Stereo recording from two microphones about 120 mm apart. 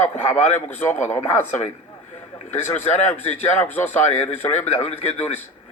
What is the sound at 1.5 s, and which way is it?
Speech, 75° left (ahead or behind).